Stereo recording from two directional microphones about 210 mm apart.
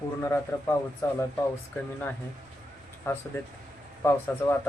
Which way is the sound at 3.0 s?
10° left (ahead or behind).